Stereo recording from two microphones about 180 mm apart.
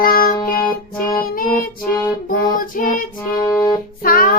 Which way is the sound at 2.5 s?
50° left (ahead or behind).